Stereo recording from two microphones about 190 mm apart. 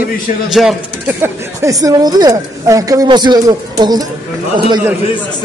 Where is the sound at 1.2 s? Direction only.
15° right (ahead or behind).